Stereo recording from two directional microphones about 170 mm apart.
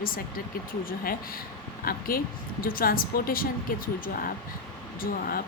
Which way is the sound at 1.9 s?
60° left (ahead or behind).